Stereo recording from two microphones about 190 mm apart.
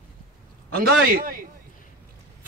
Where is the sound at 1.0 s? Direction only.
50° right (ahead or behind).